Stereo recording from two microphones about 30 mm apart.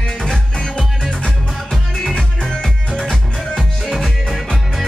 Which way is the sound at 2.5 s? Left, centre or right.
Left.